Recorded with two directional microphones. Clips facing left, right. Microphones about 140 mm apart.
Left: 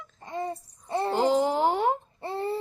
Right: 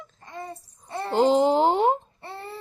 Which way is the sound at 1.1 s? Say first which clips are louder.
Right 5 dB; 20° right (ahead or behind).